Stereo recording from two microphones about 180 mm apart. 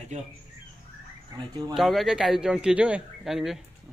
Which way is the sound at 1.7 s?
Centre (ahead or behind).